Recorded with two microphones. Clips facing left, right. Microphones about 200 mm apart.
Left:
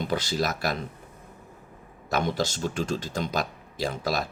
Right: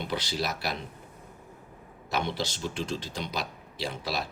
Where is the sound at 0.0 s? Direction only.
45° left (ahead or behind).